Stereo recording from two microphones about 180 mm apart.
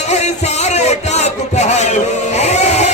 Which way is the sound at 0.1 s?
40° left (ahead or behind).